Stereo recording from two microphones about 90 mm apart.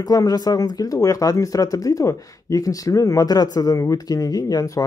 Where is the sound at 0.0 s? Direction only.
45° left (ahead or behind).